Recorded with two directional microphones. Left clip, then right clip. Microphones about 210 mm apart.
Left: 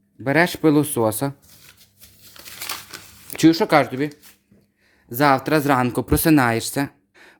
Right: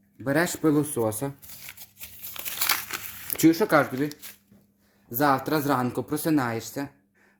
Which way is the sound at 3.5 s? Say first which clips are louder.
Left 5 dB; 10° left (ahead or behind).